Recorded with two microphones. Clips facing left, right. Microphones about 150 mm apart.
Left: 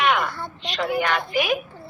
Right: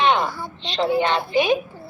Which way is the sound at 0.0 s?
25° right (ahead or behind).